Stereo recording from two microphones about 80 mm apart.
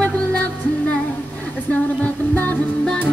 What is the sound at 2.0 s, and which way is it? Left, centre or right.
Music, left.